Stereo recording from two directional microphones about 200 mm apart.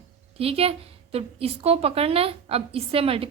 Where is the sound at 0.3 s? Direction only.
30° right (ahead or behind).